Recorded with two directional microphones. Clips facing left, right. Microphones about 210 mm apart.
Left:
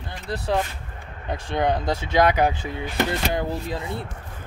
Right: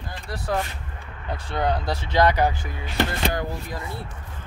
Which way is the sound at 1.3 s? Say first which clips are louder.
Left 2 dB; 20° left (ahead or behind).